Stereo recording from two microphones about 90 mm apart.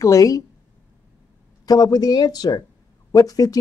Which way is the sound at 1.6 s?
45° left (ahead or behind).